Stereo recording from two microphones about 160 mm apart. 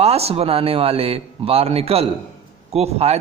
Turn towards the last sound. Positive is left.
turn(degrees=-40)  # may be behind; listen again after turning